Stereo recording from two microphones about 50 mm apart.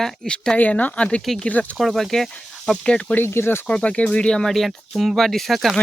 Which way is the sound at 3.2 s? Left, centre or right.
Left.